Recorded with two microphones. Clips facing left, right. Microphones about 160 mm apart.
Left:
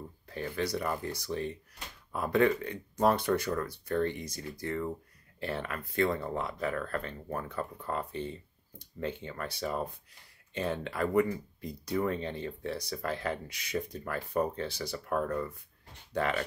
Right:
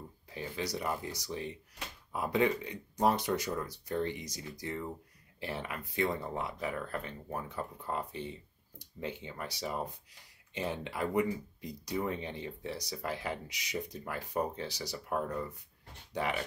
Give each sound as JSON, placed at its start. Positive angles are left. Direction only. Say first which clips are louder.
{"t": 0.3, "sound": "speech", "louder": "left 4 dB", "side_deg": -15}